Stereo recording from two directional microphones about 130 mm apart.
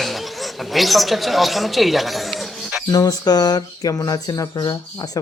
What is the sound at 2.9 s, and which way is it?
Speech, 30° left (ahead or behind).